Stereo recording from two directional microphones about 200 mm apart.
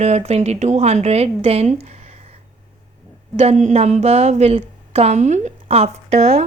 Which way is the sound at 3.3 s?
35° right (ahead or behind).